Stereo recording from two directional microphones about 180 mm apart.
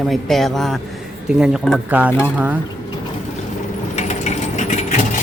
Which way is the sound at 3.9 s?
40° left (ahead or behind).